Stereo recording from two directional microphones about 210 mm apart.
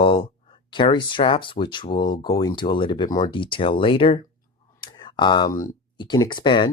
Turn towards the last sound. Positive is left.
turn(degrees=20)  # may be behind; listen again after turning